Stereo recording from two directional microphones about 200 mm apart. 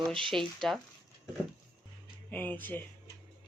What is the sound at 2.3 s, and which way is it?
Speech, 10° left (ahead or behind).